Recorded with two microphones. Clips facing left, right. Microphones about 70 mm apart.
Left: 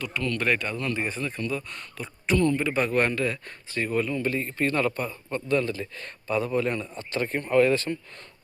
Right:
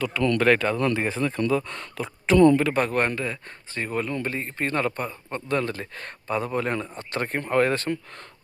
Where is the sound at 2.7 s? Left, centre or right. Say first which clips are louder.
Even; right.